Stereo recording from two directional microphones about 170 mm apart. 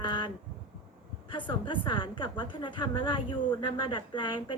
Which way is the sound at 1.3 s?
30° left (ahead or behind).